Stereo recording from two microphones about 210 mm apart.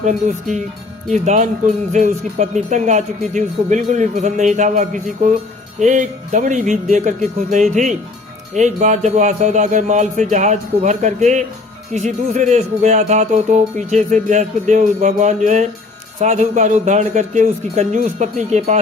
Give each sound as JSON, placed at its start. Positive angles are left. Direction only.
{"t": 0.0, "sound": "speech", "side_deg": -35}